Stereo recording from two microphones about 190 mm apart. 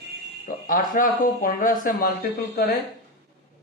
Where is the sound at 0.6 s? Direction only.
45° left (ahead or behind).